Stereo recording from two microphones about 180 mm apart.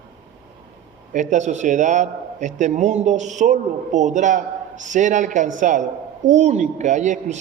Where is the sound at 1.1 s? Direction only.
40° right (ahead or behind).